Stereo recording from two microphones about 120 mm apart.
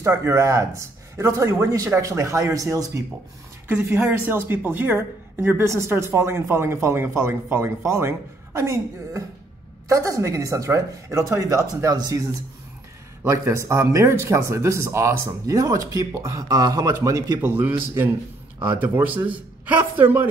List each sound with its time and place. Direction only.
0.0 s a woman's voice: 25° right (ahead or behind)
3.6 s a woman's voice: 15° right (ahead or behind)